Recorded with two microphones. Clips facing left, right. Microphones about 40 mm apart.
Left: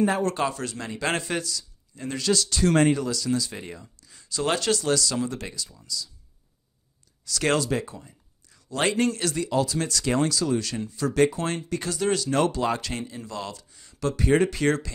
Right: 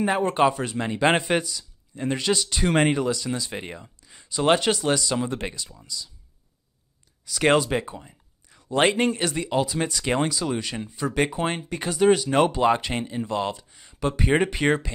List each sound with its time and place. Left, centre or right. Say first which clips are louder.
0.0 s speech: right 3 dB; right
7.2 s speech: right 4 dB; right
8.6 s speech: right 3 dB; right